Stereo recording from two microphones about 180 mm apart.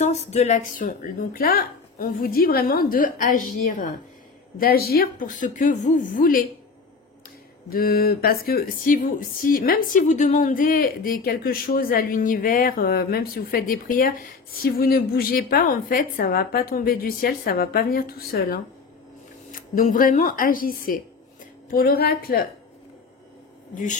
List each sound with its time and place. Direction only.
0.0 s speech: 40° left (ahead or behind)
4.6 s speech: 55° left (ahead or behind)
7.7 s speech: 55° left (ahead or behind)
19.5 s speech: 50° left (ahead or behind)
23.7 s speech: 45° left (ahead or behind)